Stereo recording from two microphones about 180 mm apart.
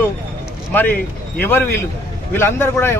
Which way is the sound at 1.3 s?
10° left (ahead or behind).